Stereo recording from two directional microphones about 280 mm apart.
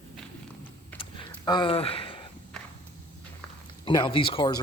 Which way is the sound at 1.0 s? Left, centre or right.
Centre.